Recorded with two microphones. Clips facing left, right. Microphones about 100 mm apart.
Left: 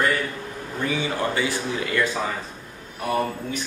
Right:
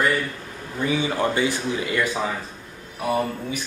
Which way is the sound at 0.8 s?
20° right (ahead or behind).